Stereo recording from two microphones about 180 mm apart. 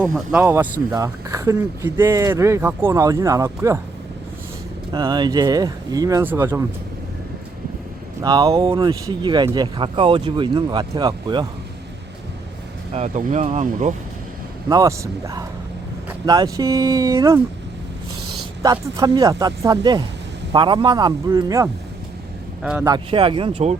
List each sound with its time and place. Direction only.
0.1 s speech: 5° right (ahead or behind)
4.9 s speech: 25° right (ahead or behind)
8.2 s speech: 20° right (ahead or behind)
12.9 s speech: 40° right (ahead or behind)
14.7 s speech: 20° right (ahead or behind)
18.6 s speech: 20° right (ahead or behind)
22.6 s speech: 5° right (ahead or behind)
22.9 s speech: 30° right (ahead or behind)